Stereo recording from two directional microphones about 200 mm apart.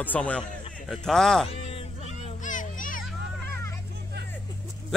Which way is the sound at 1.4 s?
30° left (ahead or behind).